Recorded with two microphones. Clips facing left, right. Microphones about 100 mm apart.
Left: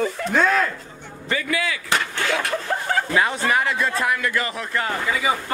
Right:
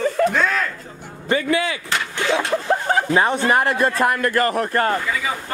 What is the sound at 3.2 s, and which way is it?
Speech, 45° right (ahead or behind).